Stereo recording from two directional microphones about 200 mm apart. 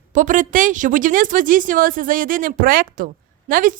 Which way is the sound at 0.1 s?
40° right (ahead or behind).